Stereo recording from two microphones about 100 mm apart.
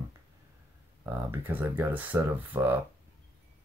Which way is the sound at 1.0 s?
20° right (ahead or behind).